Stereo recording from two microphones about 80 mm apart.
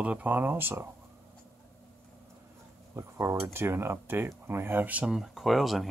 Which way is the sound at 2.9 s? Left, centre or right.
Right.